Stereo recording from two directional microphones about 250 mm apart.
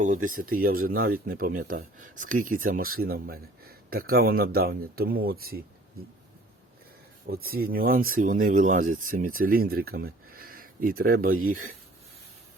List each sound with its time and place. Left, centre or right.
0.5 s speech: right
7.3 s speech: right